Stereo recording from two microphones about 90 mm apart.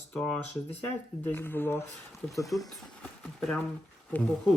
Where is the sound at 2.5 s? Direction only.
Centre (ahead or behind).